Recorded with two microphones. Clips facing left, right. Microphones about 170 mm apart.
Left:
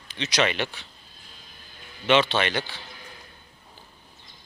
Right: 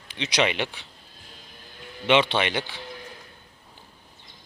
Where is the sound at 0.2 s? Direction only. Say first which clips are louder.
Even; 20° right (ahead or behind).